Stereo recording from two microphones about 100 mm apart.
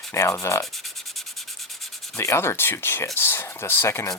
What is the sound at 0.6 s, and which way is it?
Sanding, centre (ahead or behind).